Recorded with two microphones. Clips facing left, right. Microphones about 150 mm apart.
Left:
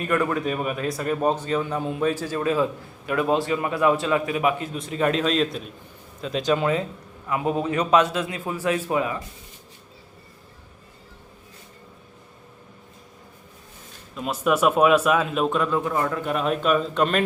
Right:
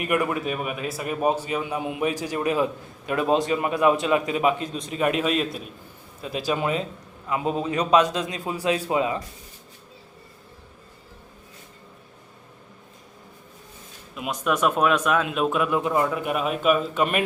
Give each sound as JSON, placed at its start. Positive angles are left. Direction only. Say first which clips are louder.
{"t": 0.0, "sound": "a man's voice", "louder": "left 1 dB", "side_deg": -10}
{"t": 14.3, "sound": "speech", "louder": "left 3 dB", "side_deg": 5}